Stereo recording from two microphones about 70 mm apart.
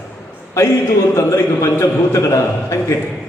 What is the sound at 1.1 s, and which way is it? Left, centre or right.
A man's voice, left.